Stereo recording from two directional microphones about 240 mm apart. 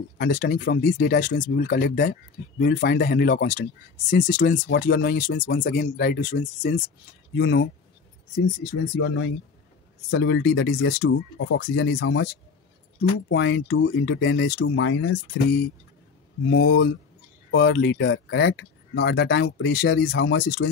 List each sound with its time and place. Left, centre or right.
0.2 s speech: left
8.9 s speech: left
13.3 s speech: left
16.4 s speech: left